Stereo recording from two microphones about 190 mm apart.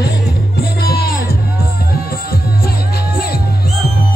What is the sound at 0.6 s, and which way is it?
Music, 55° left (ahead or behind).